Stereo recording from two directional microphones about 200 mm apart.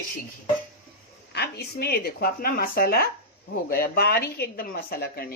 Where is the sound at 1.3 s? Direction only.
55° left (ahead or behind).